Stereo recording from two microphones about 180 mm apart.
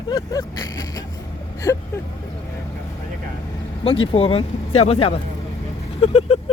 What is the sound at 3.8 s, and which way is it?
Speech, 30° left (ahead or behind).